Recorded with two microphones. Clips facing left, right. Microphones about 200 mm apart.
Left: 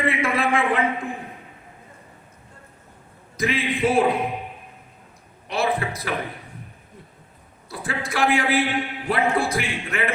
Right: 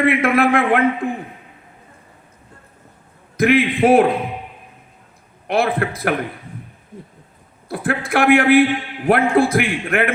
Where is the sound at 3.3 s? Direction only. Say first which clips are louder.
Right 9 dB; 60° right (ahead or behind).